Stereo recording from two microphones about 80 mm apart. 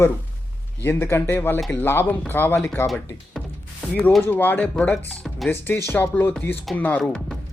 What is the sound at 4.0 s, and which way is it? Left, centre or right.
Speech, centre.